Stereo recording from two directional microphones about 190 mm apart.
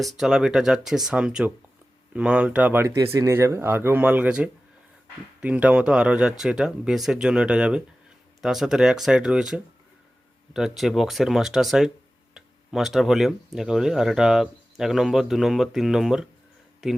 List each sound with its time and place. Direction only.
0.0 s speech: centre (ahead or behind)